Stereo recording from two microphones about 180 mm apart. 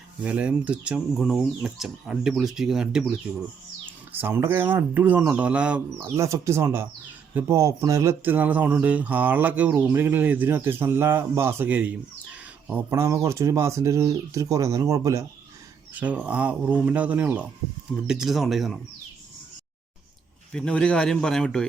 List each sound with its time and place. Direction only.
0.2 s speech: 5° right (ahead or behind)
4.1 s speech: 10° right (ahead or behind)
20.5 s speech: 5° left (ahead or behind)